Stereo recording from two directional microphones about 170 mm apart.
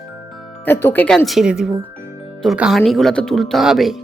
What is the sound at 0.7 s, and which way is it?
A woman's voice, 15° left (ahead or behind).